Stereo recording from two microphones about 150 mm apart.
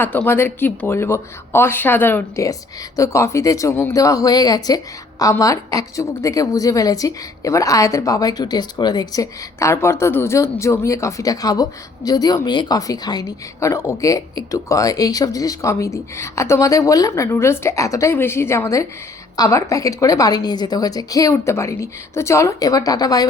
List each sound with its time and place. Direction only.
0.0 s a woman's voice: 10° left (ahead or behind)